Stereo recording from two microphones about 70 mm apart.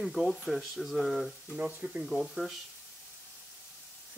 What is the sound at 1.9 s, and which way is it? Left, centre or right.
Speech, centre.